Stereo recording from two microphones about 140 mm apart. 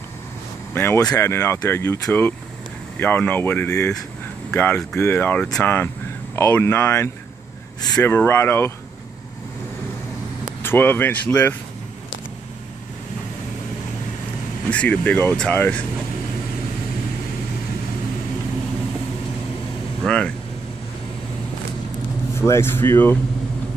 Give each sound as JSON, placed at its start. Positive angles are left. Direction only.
{"t": 0.7, "sound": "speech", "side_deg": 15}
{"t": 3.0, "sound": "speech", "side_deg": 15}
{"t": 10.6, "sound": "speech", "side_deg": 15}
{"t": 14.7, "sound": "speech", "side_deg": 10}
{"t": 20.0, "sound": "air conditioning", "side_deg": 5}
{"t": 22.4, "sound": "speech", "side_deg": 15}